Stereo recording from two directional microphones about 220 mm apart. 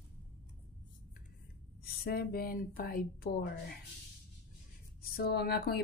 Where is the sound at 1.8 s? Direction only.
45° left (ahead or behind).